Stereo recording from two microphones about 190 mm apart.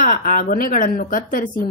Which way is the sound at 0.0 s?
50° left (ahead or behind).